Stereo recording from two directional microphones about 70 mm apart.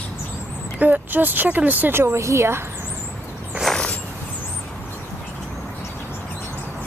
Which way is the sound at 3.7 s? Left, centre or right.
Centre.